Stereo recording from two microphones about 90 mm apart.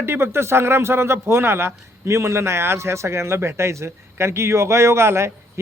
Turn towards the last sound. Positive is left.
turn(degrees=-30)  # may be behind; listen again after turning